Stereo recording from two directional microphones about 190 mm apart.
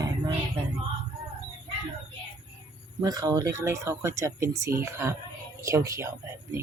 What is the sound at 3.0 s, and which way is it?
Speech, 20° right (ahead or behind).